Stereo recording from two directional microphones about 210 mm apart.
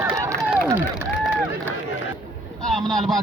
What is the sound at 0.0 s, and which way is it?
Run, 15° right (ahead or behind).